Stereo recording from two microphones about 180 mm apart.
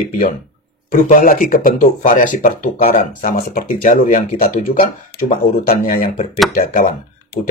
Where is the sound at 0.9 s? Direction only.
45° left (ahead or behind).